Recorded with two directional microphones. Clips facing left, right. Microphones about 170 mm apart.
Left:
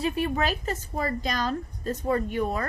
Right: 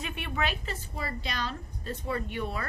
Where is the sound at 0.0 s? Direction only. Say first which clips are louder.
Left 7 dB; 40° left (ahead or behind).